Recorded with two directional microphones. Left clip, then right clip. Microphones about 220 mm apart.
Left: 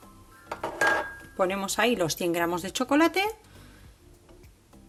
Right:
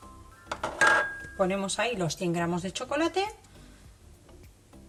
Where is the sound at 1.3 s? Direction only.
45° left (ahead or behind).